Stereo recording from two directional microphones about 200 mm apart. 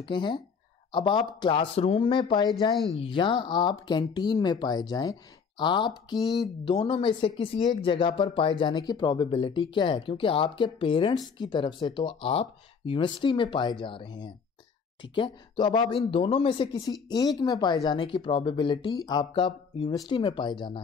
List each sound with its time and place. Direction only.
0.0 s speech: 25° left (ahead or behind)